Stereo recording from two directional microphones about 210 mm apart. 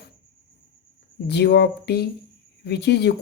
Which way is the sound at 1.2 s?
50° left (ahead or behind).